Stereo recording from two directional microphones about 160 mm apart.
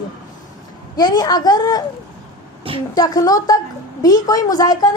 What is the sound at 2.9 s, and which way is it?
A woman's voice, 25° left (ahead or behind).